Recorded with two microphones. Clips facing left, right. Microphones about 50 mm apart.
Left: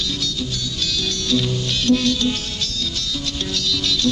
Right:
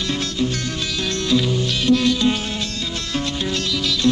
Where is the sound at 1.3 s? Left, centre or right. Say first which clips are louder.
Right 2 dB; centre.